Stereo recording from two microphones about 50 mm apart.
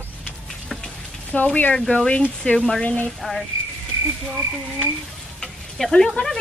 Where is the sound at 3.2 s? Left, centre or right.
Centre.